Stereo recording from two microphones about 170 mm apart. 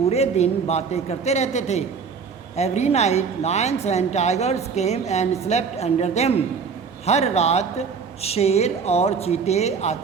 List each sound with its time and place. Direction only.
0.1 s a woman's voice: 40° left (ahead or behind)